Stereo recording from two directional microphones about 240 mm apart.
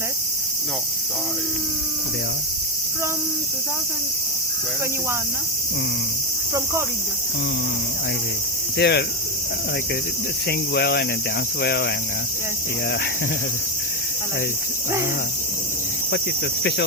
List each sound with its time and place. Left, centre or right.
8.8 s cricket: left
10.5 s cricket: left